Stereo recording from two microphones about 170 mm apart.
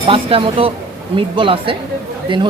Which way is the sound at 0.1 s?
30° right (ahead or behind).